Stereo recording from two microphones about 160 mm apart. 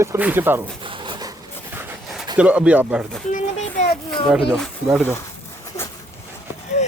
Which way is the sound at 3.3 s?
45° left (ahead or behind).